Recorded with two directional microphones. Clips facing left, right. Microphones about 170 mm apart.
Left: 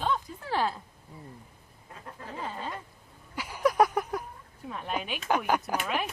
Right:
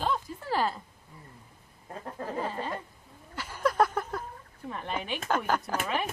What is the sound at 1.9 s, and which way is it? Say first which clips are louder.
Bird: right 7 dB; 45° right (ahead or behind).